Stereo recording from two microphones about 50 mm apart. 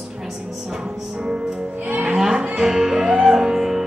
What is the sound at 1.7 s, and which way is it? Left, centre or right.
Music, right.